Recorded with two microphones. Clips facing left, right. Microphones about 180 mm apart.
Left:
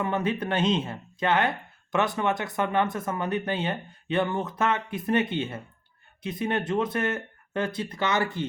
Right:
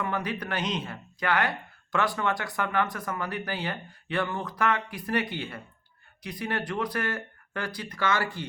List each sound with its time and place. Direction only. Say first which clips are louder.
0.0 s speech: left 4 dB; 25° left (ahead or behind)